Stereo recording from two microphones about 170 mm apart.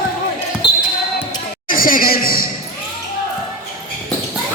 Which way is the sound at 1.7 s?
55° left (ahead or behind).